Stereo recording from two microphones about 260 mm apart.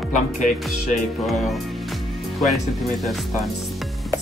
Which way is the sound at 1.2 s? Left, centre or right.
Centre.